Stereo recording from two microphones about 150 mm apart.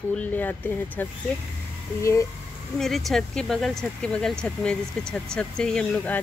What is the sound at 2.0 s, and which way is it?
Speech, 20° left (ahead or behind).